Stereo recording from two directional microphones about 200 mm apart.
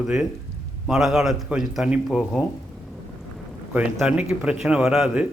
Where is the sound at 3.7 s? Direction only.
5° right (ahead or behind).